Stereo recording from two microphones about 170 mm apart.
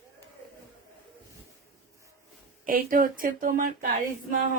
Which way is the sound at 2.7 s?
55° right (ahead or behind).